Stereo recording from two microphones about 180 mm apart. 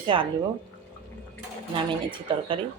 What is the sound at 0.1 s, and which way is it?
Speech, 30° right (ahead or behind).